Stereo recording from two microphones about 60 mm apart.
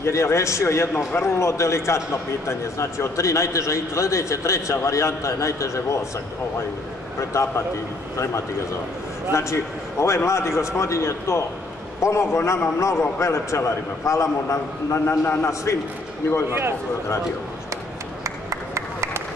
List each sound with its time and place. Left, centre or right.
0.0 s a man's voice: left
7.2 s a man's voice: left
9.3 s a man's voice: left
15.0 s a man's voice: left
16.4 s speech: right
18.2 s a sound: right